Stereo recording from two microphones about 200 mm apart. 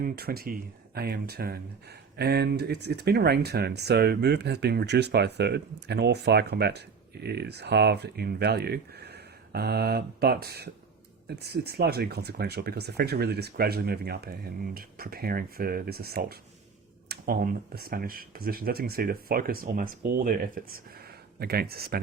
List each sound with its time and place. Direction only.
0.0 s speech: 50° right (ahead or behind)